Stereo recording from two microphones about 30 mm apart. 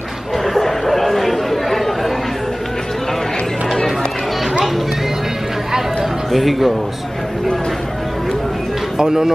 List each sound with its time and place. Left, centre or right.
0.4 s chatter: centre
6.3 s speech: centre
8.9 s speech: centre